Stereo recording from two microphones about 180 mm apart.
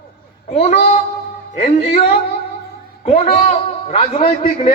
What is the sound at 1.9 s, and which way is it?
A man's voice, 35° left (ahead or behind).